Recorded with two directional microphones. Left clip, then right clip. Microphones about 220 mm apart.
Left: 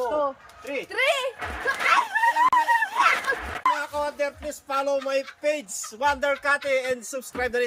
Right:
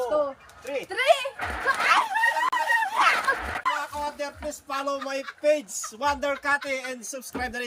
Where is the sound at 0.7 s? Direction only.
10° left (ahead or behind).